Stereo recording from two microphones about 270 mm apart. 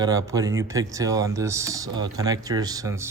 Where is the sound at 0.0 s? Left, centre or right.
Centre.